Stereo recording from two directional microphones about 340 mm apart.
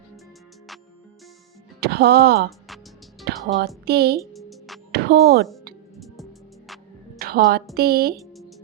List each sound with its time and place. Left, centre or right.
1.8 s speech: right
3.2 s music: right
3.8 s speech: right
4.2 s music: centre
4.9 s speech: right
7.2 s a woman's voice: right